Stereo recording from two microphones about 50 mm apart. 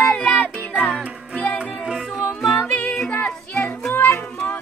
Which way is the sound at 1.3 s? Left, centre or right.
Left.